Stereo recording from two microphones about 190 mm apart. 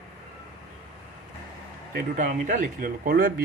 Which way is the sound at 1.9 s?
45° right (ahead or behind).